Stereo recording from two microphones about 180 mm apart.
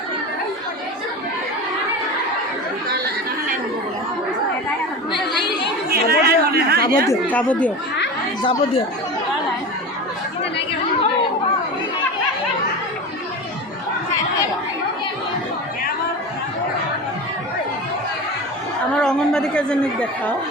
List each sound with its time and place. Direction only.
5.9 s chatter: 60° right (ahead or behind)
7.1 s speech: 10° left (ahead or behind)
8.4 s speech: 30° left (ahead or behind)
18.9 s a woman's voice: 5° left (ahead or behind)